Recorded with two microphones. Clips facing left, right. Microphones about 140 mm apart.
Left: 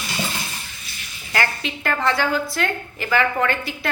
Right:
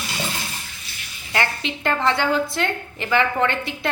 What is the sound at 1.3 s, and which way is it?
A woman's voice, 20° right (ahead or behind).